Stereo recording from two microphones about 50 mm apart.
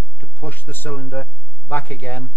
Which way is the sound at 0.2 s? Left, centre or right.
Left.